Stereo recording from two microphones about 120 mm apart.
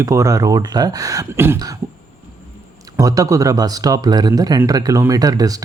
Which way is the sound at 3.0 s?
30° right (ahead or behind).